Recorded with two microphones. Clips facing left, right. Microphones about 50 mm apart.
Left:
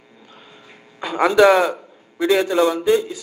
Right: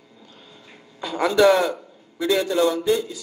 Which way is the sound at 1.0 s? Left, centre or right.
Left.